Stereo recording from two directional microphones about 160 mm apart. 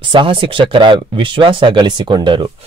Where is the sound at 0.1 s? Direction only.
30° right (ahead or behind).